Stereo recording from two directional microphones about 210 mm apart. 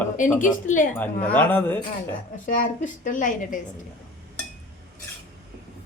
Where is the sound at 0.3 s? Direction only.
10° left (ahead or behind).